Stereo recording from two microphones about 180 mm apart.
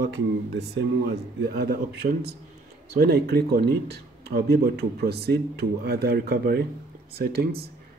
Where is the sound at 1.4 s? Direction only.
60° right (ahead or behind).